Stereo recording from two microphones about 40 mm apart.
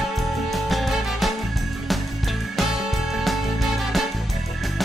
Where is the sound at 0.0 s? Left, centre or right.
Centre.